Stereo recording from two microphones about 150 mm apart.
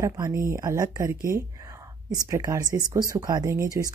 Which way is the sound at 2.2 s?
20° right (ahead or behind).